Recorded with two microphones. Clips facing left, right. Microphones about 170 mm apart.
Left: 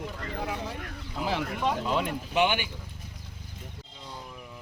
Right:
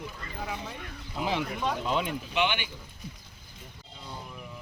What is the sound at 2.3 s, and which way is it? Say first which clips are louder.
Speech: left 4 dB; 45° left (ahead or behind).